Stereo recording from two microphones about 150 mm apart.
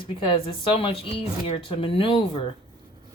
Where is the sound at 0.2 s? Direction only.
35° left (ahead or behind).